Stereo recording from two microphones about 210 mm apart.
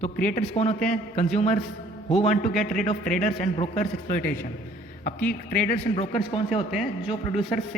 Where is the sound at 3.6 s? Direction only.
30° left (ahead or behind).